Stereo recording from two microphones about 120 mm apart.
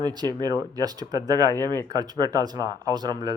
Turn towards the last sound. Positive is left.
turn(degrees=-35)  # may be behind; listen again after turning